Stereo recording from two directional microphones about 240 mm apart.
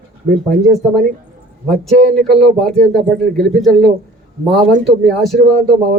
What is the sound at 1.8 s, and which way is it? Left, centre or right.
A man's voice, centre.